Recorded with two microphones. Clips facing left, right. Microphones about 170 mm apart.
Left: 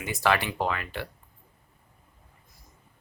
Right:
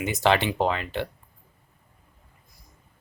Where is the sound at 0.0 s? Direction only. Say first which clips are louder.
Right 4 dB; 20° right (ahead or behind).